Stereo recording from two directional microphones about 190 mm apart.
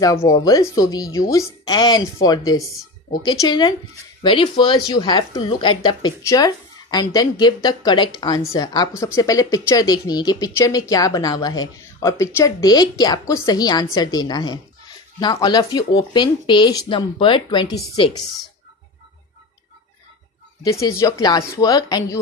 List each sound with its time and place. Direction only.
0.0 s speech: 15° left (ahead or behind)
20.6 s speech: 15° left (ahead or behind)